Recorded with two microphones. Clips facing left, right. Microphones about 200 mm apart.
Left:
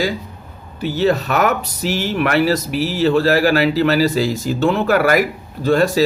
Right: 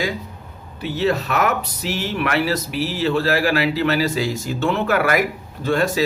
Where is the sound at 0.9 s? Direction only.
40° left (ahead or behind).